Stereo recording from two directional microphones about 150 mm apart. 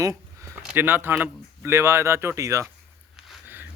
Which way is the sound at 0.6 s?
10° right (ahead or behind).